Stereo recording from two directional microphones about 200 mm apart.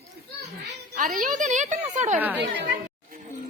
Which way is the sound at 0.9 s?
40° right (ahead or behind).